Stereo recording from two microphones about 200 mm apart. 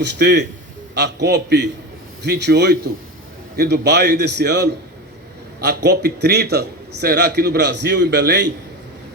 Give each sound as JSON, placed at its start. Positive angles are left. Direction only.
{"t": 0.0, "sound": "a man's voice", "side_deg": -55}